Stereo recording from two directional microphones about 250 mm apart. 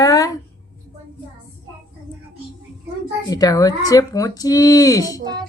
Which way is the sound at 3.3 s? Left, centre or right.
Centre.